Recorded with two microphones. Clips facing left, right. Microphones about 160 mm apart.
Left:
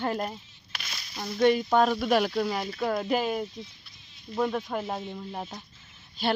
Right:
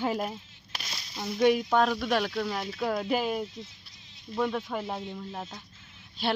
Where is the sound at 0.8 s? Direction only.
30° right (ahead or behind).